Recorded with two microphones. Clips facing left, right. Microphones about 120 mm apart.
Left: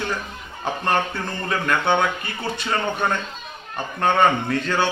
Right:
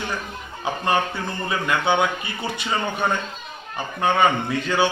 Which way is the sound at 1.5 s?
5° right (ahead or behind).